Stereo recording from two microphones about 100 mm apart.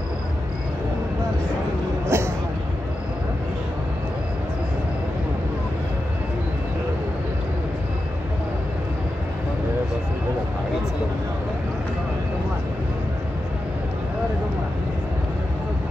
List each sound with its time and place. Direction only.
2.0 s music: 25° right (ahead or behind)